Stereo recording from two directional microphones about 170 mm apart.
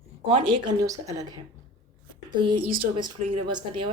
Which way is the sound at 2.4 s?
25° right (ahead or behind).